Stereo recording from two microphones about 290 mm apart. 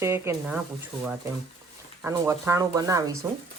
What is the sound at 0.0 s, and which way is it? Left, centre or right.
Speech, centre.